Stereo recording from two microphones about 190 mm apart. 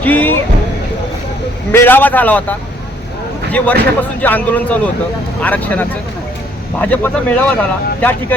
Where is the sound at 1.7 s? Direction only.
10° left (ahead or behind).